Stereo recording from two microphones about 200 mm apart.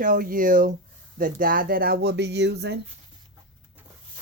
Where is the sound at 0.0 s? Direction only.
45° right (ahead or behind).